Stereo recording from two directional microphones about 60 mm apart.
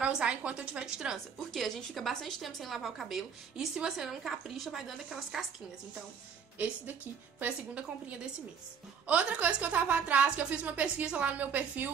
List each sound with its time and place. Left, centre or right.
0.0 s a woman's voice: centre
1.1 s a woman's voice: centre
6.6 s a woman's voice: right